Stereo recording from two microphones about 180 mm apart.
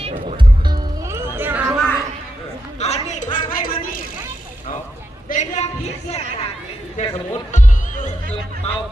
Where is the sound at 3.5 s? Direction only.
50° left (ahead or behind).